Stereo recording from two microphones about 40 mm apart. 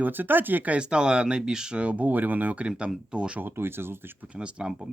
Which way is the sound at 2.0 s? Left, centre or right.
Right.